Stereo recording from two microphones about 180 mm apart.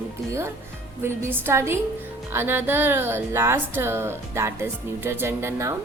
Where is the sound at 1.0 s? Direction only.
10° right (ahead or behind).